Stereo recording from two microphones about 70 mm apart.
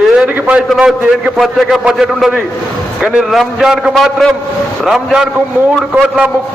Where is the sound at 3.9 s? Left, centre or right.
Centre.